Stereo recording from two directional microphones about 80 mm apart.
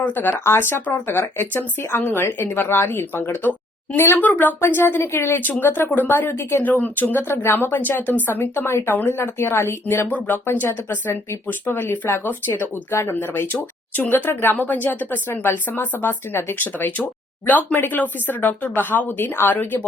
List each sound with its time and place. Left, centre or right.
0.0 s speech: left